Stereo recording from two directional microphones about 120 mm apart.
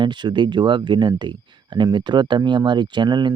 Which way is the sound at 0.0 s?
40° right (ahead or behind).